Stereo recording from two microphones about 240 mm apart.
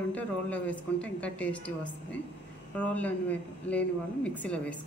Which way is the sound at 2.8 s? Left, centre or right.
Centre.